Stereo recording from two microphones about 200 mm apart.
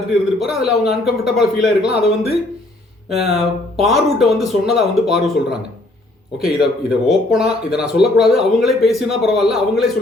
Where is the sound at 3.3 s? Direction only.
Centre (ahead or behind).